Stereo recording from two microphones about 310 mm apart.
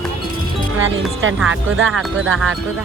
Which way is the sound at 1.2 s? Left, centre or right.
Right.